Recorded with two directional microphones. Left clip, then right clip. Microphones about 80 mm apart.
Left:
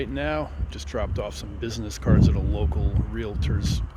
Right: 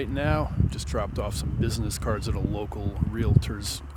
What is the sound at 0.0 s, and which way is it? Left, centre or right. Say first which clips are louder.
Speech: even; right.